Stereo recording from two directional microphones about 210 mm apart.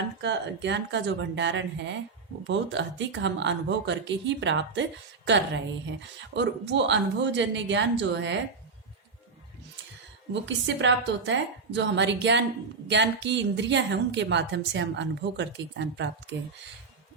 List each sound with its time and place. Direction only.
0.2 s a woman's voice: 55° right (ahead or behind)
10.4 s a woman's voice: 60° right (ahead or behind)